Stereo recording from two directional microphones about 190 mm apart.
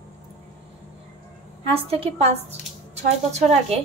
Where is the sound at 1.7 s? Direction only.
30° right (ahead or behind).